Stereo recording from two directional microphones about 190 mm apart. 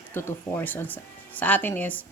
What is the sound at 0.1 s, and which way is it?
Speech, 15° left (ahead or behind).